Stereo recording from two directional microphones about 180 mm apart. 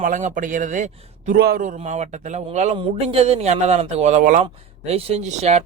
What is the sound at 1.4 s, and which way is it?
Speech, 60° right (ahead or behind).